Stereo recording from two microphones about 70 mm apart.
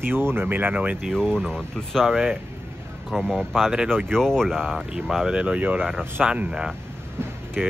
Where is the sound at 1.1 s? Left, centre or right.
Centre.